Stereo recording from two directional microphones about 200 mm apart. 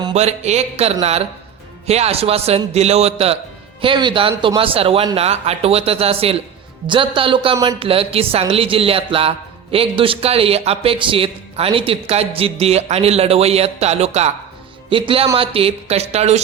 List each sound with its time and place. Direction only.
0.0 s a man's voice: 30° right (ahead or behind)